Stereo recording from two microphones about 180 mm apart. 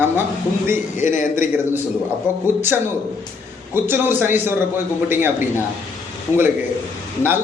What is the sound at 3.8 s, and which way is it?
Speech, 10° right (ahead or behind).